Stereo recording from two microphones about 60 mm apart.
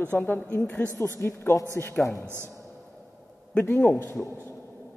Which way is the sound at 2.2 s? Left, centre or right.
Right.